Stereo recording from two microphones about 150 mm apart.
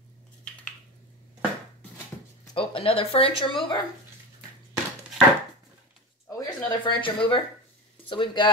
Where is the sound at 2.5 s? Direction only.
40° left (ahead or behind).